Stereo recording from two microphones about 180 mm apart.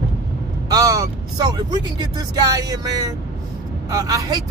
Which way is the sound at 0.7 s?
20° right (ahead or behind).